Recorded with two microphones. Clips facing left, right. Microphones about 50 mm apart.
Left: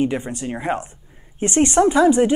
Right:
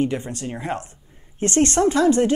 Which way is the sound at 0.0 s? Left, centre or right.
Centre.